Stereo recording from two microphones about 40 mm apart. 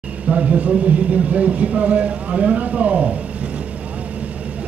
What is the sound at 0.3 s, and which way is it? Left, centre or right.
A man's voice, right.